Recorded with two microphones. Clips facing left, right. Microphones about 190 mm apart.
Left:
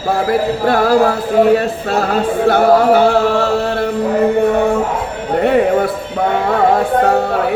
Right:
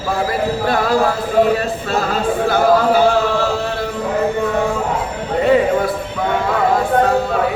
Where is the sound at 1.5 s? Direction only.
65° left (ahead or behind).